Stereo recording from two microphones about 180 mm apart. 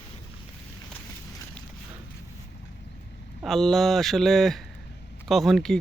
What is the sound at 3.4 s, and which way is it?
Speech, centre (ahead or behind).